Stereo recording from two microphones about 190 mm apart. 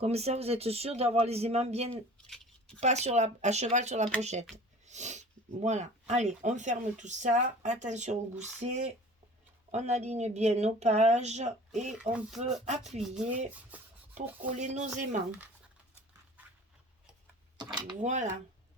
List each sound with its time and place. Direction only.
0.0 s speech: 35° right (ahead or behind)
2.2 s scissors: 5° left (ahead or behind)
2.8 s speech: 35° right (ahead or behind)
13.0 s speech: 5° right (ahead or behind)
14.2 s speech: 40° right (ahead or behind)
17.6 s speech: 25° right (ahead or behind)
18.0 s speech: 40° right (ahead or behind)